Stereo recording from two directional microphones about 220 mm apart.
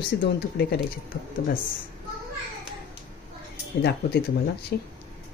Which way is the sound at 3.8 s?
50° left (ahead or behind).